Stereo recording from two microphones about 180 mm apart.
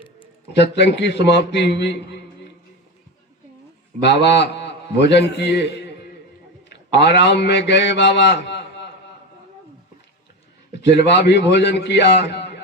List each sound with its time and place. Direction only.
0.5 s a man's voice: 70° left (ahead or behind)
4.0 s a man's voice: 70° left (ahead or behind)
6.7 s a man's voice: 70° left (ahead or behind)
10.8 s a man's voice: 70° left (ahead or behind)